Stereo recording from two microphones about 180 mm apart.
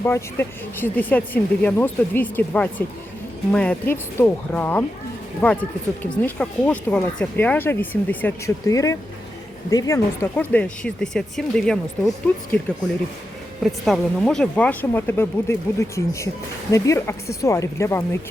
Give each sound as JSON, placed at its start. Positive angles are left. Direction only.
{"t": 0.0, "sound": "speech", "side_deg": 10}